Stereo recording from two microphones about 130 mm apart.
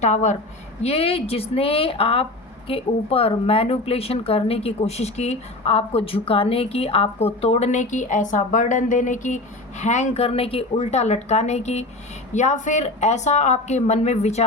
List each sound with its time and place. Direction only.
0.0 s a woman's voice: 65° left (ahead or behind)
0.8 s a woman's voice: 50° left (ahead or behind)